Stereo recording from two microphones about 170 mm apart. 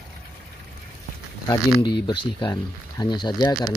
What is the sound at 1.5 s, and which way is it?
Speech, 25° left (ahead or behind).